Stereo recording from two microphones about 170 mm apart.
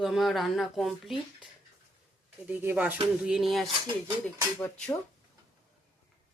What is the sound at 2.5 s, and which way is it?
Speech, 10° right (ahead or behind).